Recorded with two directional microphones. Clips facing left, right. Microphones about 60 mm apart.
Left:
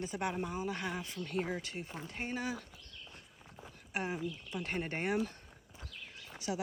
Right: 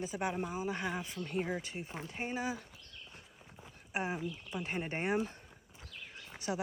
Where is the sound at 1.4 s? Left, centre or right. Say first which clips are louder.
Even; centre.